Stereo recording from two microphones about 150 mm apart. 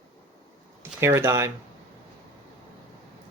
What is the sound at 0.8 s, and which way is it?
Speech, 15° right (ahead or behind).